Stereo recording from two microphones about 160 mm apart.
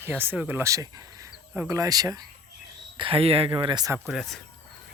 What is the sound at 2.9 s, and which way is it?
Speech, 35° right (ahead or behind).